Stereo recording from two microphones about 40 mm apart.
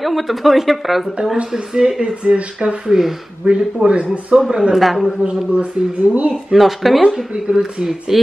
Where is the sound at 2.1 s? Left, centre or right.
Right.